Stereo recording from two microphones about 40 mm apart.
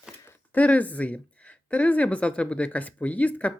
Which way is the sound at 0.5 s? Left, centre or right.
Left.